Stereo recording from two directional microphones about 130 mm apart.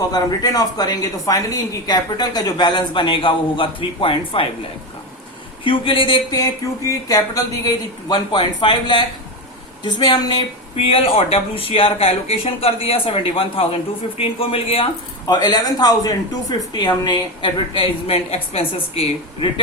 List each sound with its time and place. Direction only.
0.1 s speech: 30° left (ahead or behind)
5.6 s speech: 40° left (ahead or behind)
6.3 s speech: 30° left (ahead or behind); by 14.8 s 45° left (ahead or behind)
15.3 s speech: 35° left (ahead or behind)
18.0 s speech: 50° left (ahead or behind)